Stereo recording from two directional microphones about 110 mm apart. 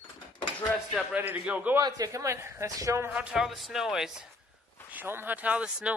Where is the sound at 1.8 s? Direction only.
35° right (ahead or behind).